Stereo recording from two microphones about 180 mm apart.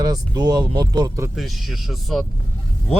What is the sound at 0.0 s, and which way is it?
Speech, 20° right (ahead or behind).